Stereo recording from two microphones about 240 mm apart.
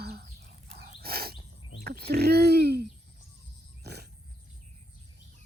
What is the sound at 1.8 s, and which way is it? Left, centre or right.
Speech, right.